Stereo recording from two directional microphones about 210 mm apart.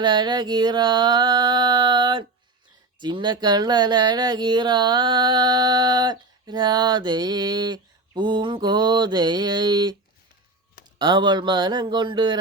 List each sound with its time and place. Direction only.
0.0 s speech: 20° right (ahead or behind)
10.9 s speech: 20° right (ahead or behind)